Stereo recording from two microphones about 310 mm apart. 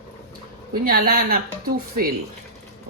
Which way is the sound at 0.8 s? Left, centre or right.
Right.